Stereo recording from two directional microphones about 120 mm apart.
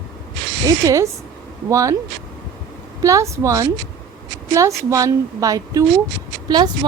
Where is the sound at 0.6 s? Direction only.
25° right (ahead or behind).